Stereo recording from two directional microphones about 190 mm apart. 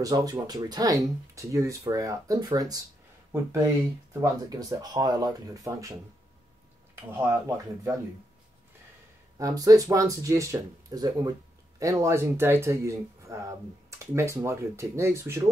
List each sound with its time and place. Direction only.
0.0 s speech: 20° right (ahead or behind)
7.1 s speech: 10° right (ahead or behind)
9.4 s speech: 20° right (ahead or behind)